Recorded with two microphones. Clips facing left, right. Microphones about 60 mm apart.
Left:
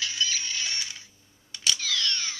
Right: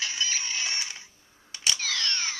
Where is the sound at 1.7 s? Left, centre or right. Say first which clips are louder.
Left 1 dB; right.